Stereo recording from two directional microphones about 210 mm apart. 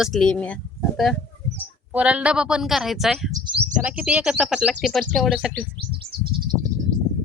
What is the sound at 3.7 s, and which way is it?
Speech, 5° right (ahead or behind).